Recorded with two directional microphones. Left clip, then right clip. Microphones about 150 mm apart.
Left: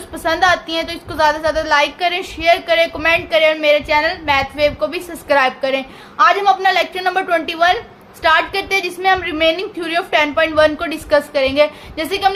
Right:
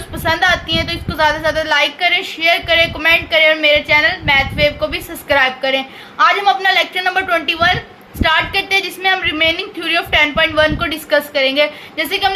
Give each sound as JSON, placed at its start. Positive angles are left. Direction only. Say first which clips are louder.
{"t": 0.3, "sound": "a woman's voice", "louder": "even", "side_deg": 35}